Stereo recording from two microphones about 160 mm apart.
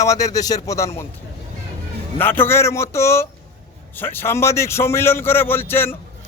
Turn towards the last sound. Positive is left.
turn(degrees=15)  # may be behind; listen again after turning